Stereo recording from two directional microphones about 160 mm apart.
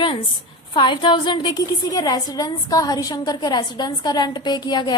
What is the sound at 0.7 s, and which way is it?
A woman's voice, 30° left (ahead or behind).